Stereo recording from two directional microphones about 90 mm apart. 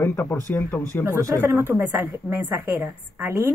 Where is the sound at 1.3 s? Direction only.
25° right (ahead or behind).